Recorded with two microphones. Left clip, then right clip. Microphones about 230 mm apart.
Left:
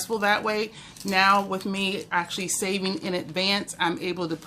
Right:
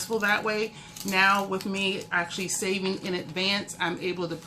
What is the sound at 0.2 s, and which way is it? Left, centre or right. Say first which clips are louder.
Speech: left 2 dB; left.